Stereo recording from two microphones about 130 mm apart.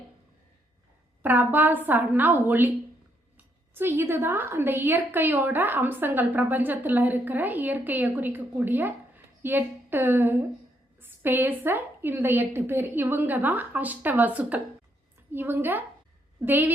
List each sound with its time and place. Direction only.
1.2 s a woman's voice: 15° right (ahead or behind)